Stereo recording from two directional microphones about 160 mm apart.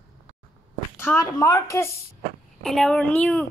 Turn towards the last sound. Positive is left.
turn(degrees=5)  # may be behind; listen again after turning